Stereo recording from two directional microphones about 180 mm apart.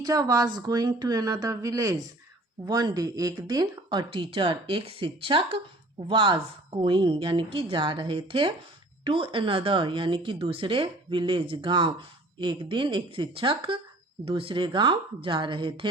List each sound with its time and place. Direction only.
0.0 s speech: 20° right (ahead or behind)